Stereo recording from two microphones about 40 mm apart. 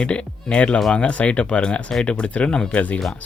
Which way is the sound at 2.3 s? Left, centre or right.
Left.